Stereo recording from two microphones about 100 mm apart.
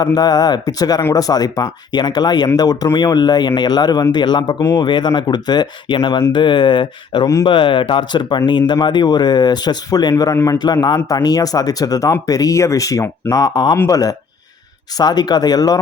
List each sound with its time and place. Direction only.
0.0 s speech: 40° left (ahead or behind)
10.6 s speech: 45° left (ahead or behind)